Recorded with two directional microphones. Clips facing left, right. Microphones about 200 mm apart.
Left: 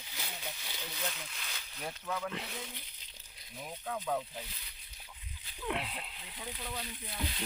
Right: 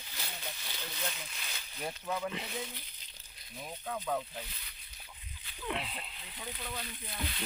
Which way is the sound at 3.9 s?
5° left (ahead or behind).